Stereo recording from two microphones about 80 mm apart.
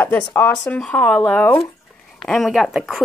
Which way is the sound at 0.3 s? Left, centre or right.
Centre.